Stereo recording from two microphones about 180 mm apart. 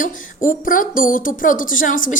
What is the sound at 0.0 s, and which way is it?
Speech, 50° left (ahead or behind).